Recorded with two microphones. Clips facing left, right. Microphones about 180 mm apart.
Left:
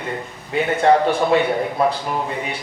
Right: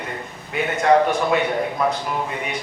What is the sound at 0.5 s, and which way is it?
Speech, 30° left (ahead or behind).